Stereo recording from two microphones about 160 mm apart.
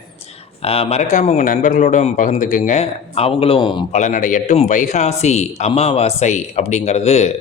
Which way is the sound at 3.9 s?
50° left (ahead or behind).